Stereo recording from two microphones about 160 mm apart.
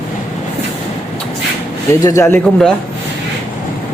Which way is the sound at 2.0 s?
20° left (ahead or behind).